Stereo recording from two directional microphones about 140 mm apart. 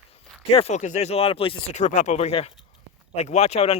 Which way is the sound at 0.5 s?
50° left (ahead or behind).